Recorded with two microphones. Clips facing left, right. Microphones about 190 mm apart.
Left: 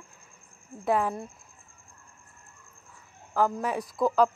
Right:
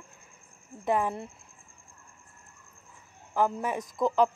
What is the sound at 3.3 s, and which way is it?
Speech, 10° right (ahead or behind).